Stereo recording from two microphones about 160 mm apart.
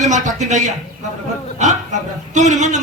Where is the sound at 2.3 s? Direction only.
50° right (ahead or behind).